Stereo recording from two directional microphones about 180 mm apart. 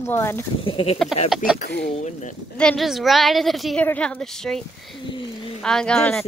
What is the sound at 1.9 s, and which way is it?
Speech, 40° left (ahead or behind).